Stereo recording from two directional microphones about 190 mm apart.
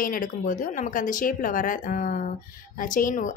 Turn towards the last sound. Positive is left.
turn(degrees=45)  # may be behind; listen again after turning